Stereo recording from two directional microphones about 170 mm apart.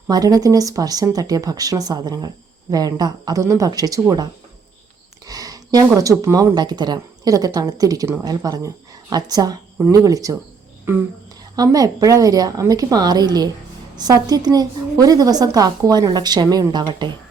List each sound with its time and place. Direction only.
0.1 s speech: 20° right (ahead or behind)
11.5 s speech: 20° right (ahead or behind)